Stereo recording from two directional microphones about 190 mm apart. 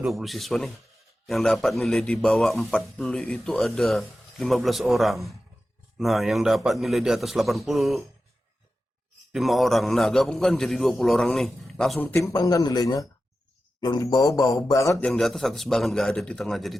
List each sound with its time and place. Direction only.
0.0 s a man's voice: centre (ahead or behind)
9.3 s a man's voice: centre (ahead or behind)
12.0 s speech: 15° left (ahead or behind)
15.0 s a man's voice: centre (ahead or behind)